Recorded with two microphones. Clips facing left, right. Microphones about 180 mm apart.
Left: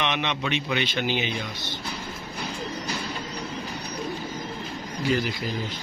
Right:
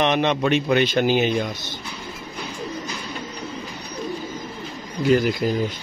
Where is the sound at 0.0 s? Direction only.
40° right (ahead or behind).